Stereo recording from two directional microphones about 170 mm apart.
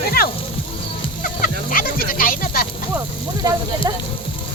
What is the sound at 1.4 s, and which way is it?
Fowl, 55° left (ahead or behind).